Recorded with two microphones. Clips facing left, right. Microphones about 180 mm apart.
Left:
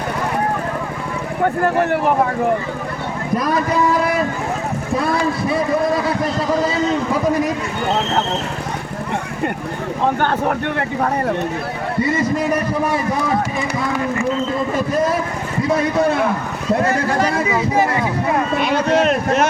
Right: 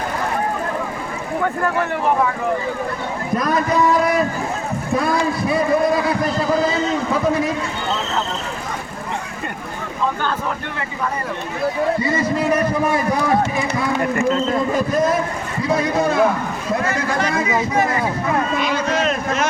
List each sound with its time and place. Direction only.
1.6 s speech: 45° left (ahead or behind)
10.2 s speech: 60° left (ahead or behind)
16.7 s a man's voice: 35° left (ahead or behind)
18.5 s speech: 60° left (ahead or behind)